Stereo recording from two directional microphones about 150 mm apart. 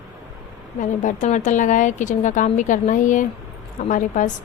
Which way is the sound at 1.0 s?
55° left (ahead or behind).